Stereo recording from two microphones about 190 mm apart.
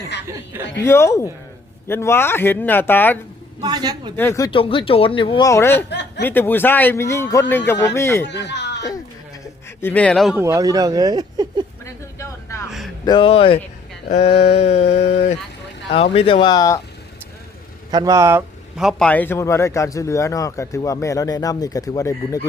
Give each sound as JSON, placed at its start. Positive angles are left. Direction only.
{"t": 0.8, "sound": "a man's voice", "side_deg": 15}
{"t": 3.6, "sound": "speech", "side_deg": -20}
{"t": 4.2, "sound": "speech", "side_deg": 15}
{"t": 5.9, "sound": "a sound", "side_deg": 65}
{"t": 6.2, "sound": "a man's voice", "side_deg": 10}
{"t": 8.3, "sound": "speech", "side_deg": 65}
{"t": 9.4, "sound": "a sound", "side_deg": 10}
{"t": 10.3, "sound": "speech", "side_deg": -15}
{"t": 12.2, "sound": "a sound", "side_deg": 15}
{"t": 13.1, "sound": "speech", "side_deg": 25}
{"t": 14.1, "sound": "a sound", "side_deg": 35}
{"t": 16.1, "sound": "speech", "side_deg": 30}
{"t": 17.9, "sound": "a man's voice", "side_deg": -20}